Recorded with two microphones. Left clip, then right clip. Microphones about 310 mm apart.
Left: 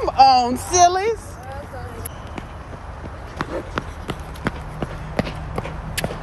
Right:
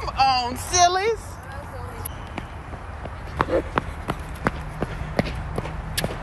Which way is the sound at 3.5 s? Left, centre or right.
Centre.